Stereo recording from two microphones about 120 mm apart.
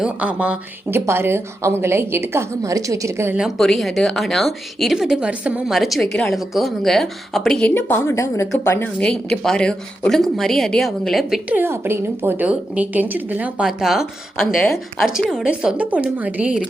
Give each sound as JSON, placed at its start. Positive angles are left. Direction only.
{"t": 0.0, "sound": "speech", "side_deg": -10}
{"t": 3.3, "sound": "a woman's voice", "side_deg": 0}
{"t": 7.7, "sound": "a woman's voice", "side_deg": 15}
{"t": 9.0, "sound": "a woman's voice", "side_deg": 5}
{"t": 11.4, "sound": "a woman's voice", "side_deg": -15}